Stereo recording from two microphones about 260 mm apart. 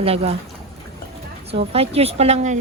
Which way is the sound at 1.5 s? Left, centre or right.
Right.